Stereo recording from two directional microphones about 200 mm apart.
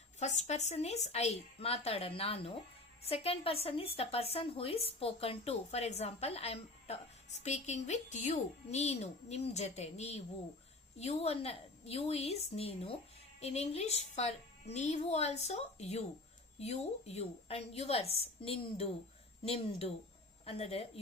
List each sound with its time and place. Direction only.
0.2 s a woman's voice: 35° left (ahead or behind)
20.4 s a woman's voice: 30° left (ahead or behind)